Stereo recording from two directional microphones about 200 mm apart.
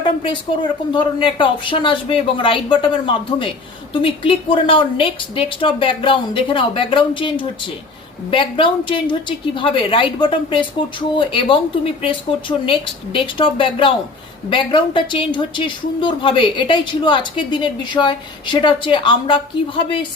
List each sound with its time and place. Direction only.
0.0 s a woman's voice: 25° left (ahead or behind)